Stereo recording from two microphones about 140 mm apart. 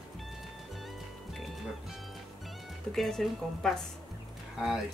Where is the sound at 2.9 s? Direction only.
Centre (ahead or behind).